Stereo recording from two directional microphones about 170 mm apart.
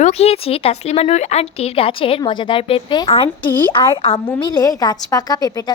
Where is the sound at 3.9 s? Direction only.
35° left (ahead or behind).